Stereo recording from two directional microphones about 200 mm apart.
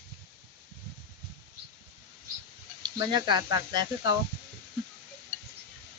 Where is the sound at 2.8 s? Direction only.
20° right (ahead or behind).